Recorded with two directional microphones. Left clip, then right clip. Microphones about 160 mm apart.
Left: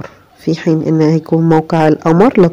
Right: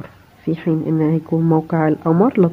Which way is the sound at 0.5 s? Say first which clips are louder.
Left 6 dB; 30° left (ahead or behind).